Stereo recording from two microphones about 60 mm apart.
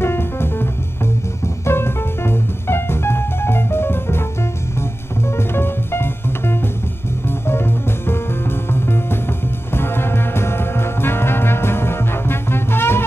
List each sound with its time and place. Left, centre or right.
0.0 s music: left
1.7 s music: left
5.5 s music: left
9.8 s brass instrument: left